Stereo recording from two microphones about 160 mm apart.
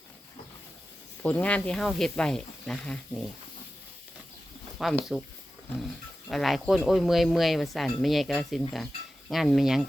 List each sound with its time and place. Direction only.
1.2 s speech: 10° left (ahead or behind)
4.8 s speech: centre (ahead or behind)
6.2 s speech: centre (ahead or behind)